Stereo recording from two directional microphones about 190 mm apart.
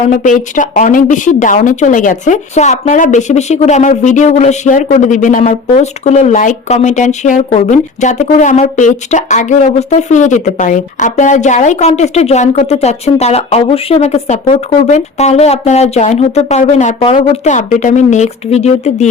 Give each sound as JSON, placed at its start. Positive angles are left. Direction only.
{"t": 0.1, "sound": "a woman's voice", "side_deg": 40}